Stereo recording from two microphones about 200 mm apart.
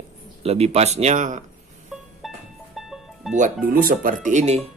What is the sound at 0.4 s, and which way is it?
Speech, 30° right (ahead or behind).